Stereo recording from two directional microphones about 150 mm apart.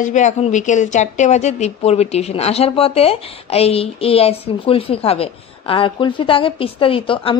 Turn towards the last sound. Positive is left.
turn(degrees=35)  # may be behind; listen again after turning